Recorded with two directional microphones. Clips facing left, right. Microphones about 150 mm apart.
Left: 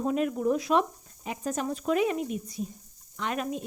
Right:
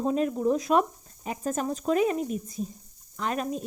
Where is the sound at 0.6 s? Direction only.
45° right (ahead or behind).